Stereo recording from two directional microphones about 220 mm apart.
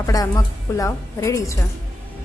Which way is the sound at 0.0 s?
15° left (ahead or behind).